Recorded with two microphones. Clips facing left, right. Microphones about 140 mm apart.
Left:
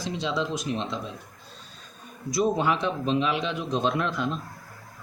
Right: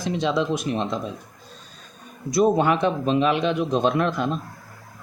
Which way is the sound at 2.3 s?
55° right (ahead or behind).